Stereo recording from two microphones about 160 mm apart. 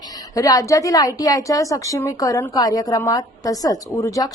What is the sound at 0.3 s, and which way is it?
A woman's voice, 20° left (ahead or behind).